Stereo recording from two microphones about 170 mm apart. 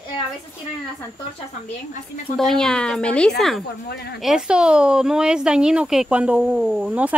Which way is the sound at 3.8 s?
70° left (ahead or behind).